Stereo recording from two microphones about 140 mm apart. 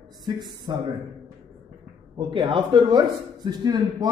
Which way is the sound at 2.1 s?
35° right (ahead or behind).